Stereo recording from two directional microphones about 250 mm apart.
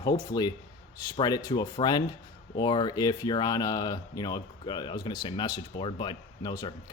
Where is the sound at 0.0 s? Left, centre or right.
Centre.